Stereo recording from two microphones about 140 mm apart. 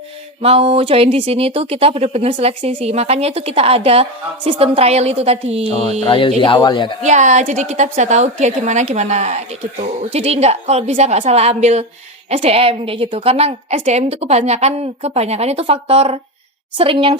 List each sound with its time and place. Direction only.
0.4 s a woman's voice: 45° right (ahead or behind)
6.1 s speech: 35° left (ahead or behind)
7.0 s a woman's voice: 60° right (ahead or behind); by 17.2 s 40° right (ahead or behind)